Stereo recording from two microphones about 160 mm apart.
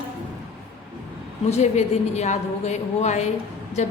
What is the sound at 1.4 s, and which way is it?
A woman's voice, 45° left (ahead or behind).